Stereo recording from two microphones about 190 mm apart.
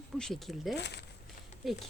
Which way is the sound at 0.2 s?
Centre (ahead or behind).